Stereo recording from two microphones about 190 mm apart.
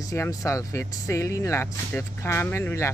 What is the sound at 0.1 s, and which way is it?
Speech, 15° left (ahead or behind).